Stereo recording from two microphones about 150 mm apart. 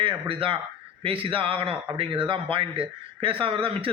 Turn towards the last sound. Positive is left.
turn(degrees=-40)  # may be behind; listen again after turning